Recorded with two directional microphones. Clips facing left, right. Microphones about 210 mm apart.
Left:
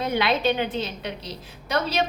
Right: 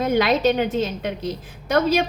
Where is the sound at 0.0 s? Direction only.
45° right (ahead or behind).